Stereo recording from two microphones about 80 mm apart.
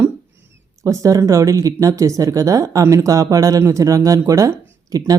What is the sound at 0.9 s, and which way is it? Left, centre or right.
Speech, right.